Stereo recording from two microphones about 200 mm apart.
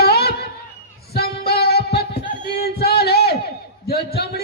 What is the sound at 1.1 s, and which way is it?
Music, 50° left (ahead or behind).